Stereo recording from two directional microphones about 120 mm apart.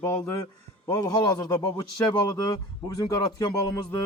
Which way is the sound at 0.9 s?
35° left (ahead or behind).